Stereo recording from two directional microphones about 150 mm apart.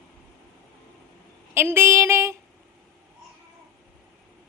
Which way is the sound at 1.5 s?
15° right (ahead or behind).